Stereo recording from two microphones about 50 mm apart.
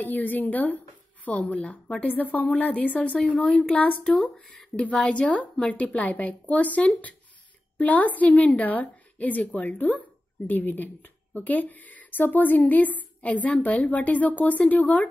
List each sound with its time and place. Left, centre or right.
0.0 s a woman's voice: left
3.4 s speech: centre
3.7 s speech: left
4.1 s speech: centre
4.8 s a woman's voice: left